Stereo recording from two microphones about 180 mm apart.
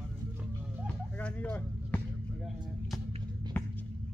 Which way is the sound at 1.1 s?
10° left (ahead or behind).